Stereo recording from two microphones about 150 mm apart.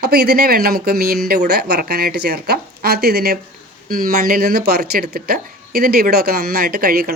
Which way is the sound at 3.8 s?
70° right (ahead or behind).